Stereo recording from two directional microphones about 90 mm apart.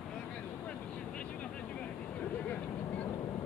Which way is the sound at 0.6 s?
15° left (ahead or behind).